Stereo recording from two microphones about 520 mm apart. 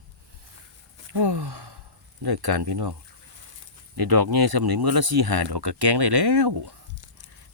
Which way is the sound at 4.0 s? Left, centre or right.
Right.